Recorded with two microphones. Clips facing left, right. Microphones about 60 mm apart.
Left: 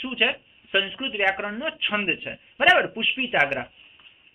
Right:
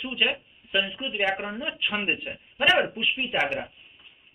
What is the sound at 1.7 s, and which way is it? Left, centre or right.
Speech, left.